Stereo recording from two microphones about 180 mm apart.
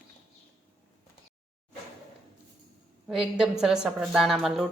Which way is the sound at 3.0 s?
5° right (ahead or behind).